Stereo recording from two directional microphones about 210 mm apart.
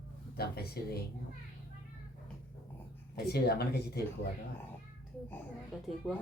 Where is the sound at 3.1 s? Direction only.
50° left (ahead or behind).